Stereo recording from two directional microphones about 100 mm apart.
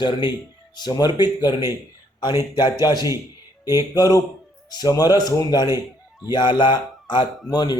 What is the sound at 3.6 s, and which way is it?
Music, 25° right (ahead or behind).